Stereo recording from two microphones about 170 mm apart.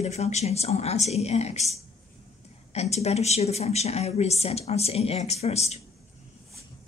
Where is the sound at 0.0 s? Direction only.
40° left (ahead or behind).